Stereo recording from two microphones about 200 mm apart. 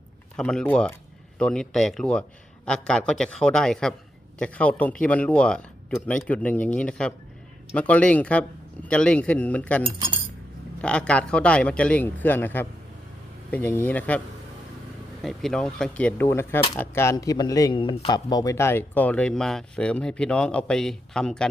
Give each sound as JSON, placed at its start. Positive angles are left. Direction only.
{"t": 0.3, "sound": "a man's voice", "side_deg": 5}
{"t": 9.8, "sound": "speech", "side_deg": -25}
{"t": 10.8, "sound": "a man's voice", "side_deg": 5}
{"t": 15.2, "sound": "a man's voice", "side_deg": 0}